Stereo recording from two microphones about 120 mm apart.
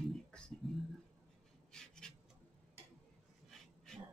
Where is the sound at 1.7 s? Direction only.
5° left (ahead or behind).